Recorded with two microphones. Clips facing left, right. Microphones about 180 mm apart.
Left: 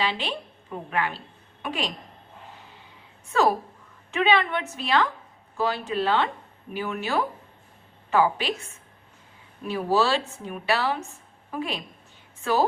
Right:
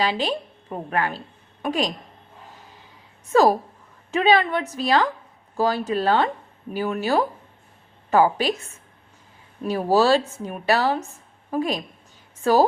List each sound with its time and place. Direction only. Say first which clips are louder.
0.0 s a woman's voice: right 5 dB; 40° right (ahead or behind)
3.3 s a woman's voice: right 5 dB; 40° right (ahead or behind)
9.6 s a woman's voice: right 5 dB; 40° right (ahead or behind)